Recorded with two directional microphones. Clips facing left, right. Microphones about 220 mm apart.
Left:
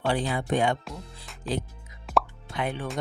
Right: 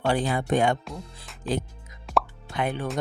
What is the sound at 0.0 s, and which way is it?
Speech, 45° right (ahead or behind).